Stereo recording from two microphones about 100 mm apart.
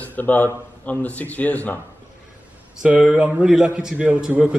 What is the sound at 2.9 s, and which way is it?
A man's voice, 10° right (ahead or behind).